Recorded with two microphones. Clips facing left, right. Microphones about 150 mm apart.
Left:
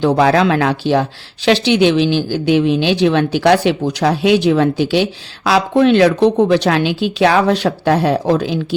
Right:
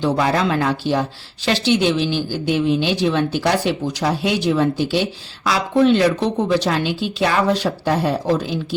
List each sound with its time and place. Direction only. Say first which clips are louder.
0.0 s a woman's voice: left 6 dB; 70° left (ahead or behind)
3.3 s a woman's voice: left 6 dB; 85° left